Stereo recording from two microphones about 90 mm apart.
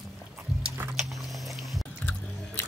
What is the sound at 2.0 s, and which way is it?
Chewing, 20° left (ahead or behind).